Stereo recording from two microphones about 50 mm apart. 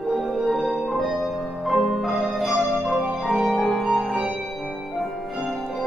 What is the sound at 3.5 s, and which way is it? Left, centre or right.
Keyboard, centre.